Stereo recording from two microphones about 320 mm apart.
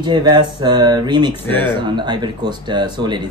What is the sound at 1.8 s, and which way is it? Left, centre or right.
Speech, centre.